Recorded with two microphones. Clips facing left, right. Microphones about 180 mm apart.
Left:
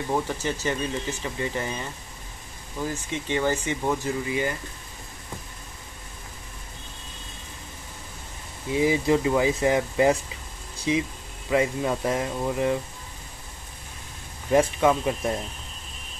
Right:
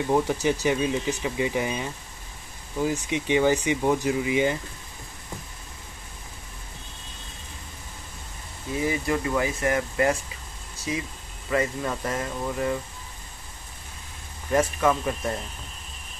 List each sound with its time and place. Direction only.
0.1 s speech: 10° right (ahead or behind)
8.7 s speech: 20° left (ahead or behind)
11.5 s speech: 15° left (ahead or behind)
14.5 s speech: 15° left (ahead or behind)